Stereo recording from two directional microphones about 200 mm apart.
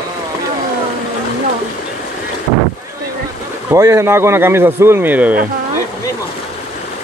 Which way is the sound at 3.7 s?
15° right (ahead or behind).